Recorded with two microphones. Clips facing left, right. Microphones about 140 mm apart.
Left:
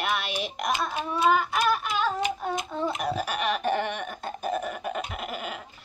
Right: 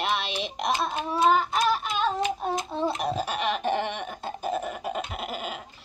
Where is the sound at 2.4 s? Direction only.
30° right (ahead or behind).